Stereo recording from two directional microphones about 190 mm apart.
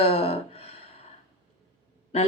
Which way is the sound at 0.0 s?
30° left (ahead or behind).